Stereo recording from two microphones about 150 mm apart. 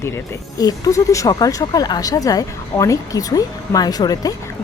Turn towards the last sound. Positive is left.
turn(degrees=25)  # may be behind; listen again after turning